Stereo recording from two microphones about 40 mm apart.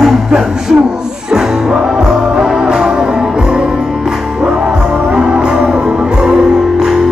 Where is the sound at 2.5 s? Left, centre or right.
Right.